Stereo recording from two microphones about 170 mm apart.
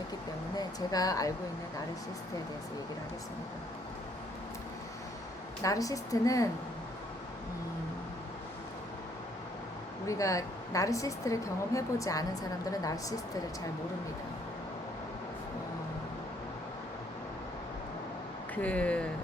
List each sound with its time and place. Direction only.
0.5 s speech: 20° left (ahead or behind)
5.6 s a woman's voice: 20° left (ahead or behind)
10.1 s a woman's voice: 20° left (ahead or behind)
18.5 s speech: 10° left (ahead or behind)